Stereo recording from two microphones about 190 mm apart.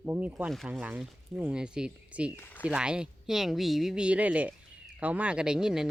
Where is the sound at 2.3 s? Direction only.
10° left (ahead or behind).